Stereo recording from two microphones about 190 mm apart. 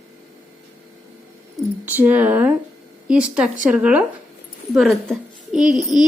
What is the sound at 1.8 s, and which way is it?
A woman's voice, 10° right (ahead or behind).